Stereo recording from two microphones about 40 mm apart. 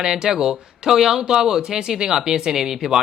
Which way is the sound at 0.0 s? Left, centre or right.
Centre.